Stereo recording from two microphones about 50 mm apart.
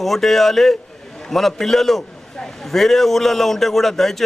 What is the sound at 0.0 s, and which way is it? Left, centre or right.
A man's voice, centre.